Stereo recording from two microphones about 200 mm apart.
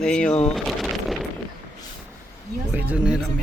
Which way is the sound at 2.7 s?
10° right (ahead or behind).